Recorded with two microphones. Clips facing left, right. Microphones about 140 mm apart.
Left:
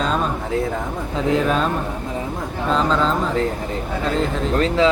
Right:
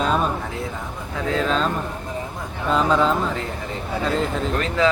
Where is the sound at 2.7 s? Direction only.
10° right (ahead or behind).